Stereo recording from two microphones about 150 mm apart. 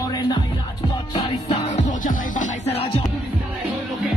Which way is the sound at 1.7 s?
55° left (ahead or behind).